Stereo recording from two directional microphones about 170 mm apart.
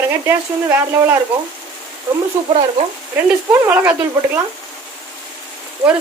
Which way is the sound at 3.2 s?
10° right (ahead or behind).